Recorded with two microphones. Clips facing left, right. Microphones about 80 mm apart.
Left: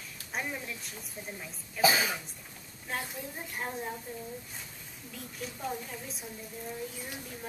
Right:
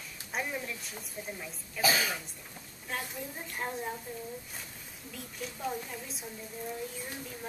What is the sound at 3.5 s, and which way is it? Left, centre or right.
Speech, centre.